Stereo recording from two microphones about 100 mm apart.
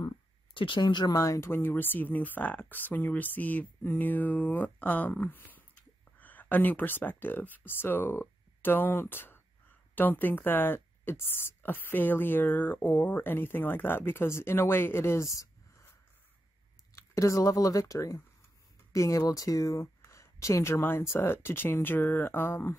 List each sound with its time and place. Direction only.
0.6 s speech: 50° left (ahead or behind)
1.2 s speech: 30° left (ahead or behind)
16.9 s speech: 30° left (ahead or behind)